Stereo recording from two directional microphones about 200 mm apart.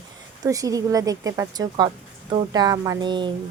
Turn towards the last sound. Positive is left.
turn(degrees=-20)  # may be behind; listen again after turning